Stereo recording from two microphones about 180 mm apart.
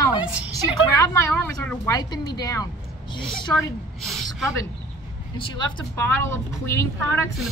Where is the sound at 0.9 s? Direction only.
15° left (ahead or behind).